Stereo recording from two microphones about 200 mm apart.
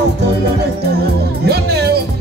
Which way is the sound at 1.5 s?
55° right (ahead or behind).